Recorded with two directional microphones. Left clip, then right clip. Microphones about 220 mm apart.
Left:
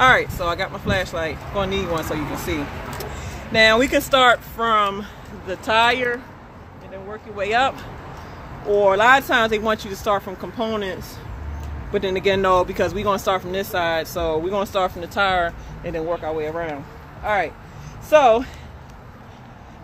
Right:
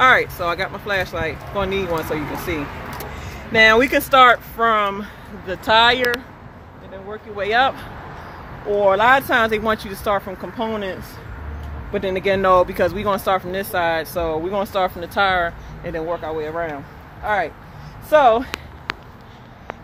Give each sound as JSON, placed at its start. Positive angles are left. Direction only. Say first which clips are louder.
{"t": 0.0, "sound": "speech", "louder": "right 1 dB", "side_deg": 0}
{"t": 5.5, "sound": "speech", "louder": "right 3 dB", "side_deg": -30}
{"t": 7.3, "sound": "speech", "louder": "right 2 dB", "side_deg": -20}
{"t": 8.7, "sound": "speech", "louder": "even", "side_deg": -10}
{"t": 18.1, "sound": "speech", "louder": "even", "side_deg": -10}